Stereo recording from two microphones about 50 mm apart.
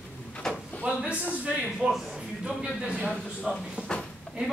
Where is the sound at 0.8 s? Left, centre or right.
Right.